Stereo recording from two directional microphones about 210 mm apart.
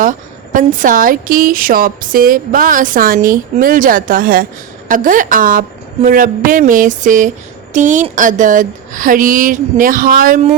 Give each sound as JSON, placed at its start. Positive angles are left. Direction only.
{"t": 0.0, "sound": "a woman's voice", "side_deg": -40}